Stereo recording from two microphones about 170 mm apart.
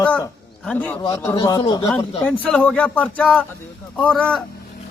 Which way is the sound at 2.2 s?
10° left (ahead or behind).